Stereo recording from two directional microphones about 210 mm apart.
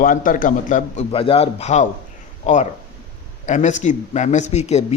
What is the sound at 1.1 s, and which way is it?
A man's voice, 25° left (ahead or behind).